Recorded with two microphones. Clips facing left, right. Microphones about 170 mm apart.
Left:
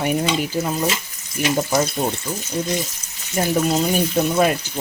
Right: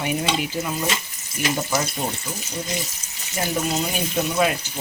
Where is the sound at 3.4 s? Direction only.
40° left (ahead or behind).